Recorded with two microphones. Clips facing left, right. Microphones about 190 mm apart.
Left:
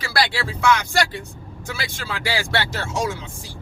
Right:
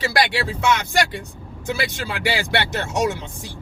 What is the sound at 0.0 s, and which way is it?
Speech, 20° right (ahead or behind).